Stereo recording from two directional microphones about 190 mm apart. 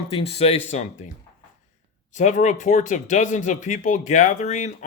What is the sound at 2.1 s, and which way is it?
Speech, 40° left (ahead or behind).